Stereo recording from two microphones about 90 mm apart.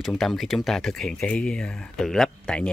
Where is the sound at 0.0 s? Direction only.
5° left (ahead or behind).